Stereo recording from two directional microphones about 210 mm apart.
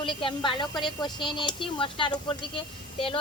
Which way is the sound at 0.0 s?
25° left (ahead or behind).